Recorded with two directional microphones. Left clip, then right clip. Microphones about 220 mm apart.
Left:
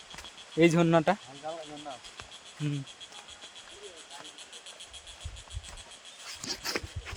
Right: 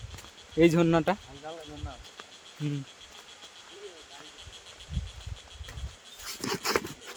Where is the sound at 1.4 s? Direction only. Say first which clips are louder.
Left 3 dB; 25° left (ahead or behind).